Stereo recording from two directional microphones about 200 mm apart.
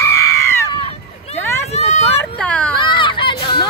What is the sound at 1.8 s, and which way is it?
Vehicle, 35° left (ahead or behind).